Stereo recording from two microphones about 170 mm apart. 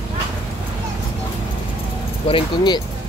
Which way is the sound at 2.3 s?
30° left (ahead or behind).